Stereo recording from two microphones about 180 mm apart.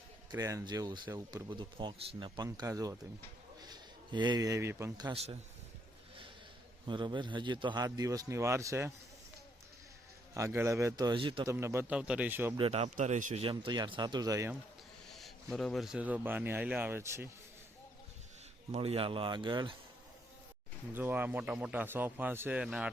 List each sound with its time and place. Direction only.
0.3 s speech: 20° right (ahead or behind)
5.1 s speech: 35° right (ahead or behind)
6.8 s speech: 25° right (ahead or behind)
10.3 s a man's voice: 15° right (ahead or behind)
11.4 s a man's voice: 15° right (ahead or behind)
12.5 s speech: 35° right (ahead or behind)
15.1 s a man's voice: centre (ahead or behind); by 17.2 s 15° right (ahead or behind)
18.7 s speech: 35° right (ahead or behind)
20.9 s a man's voice: 10° right (ahead or behind)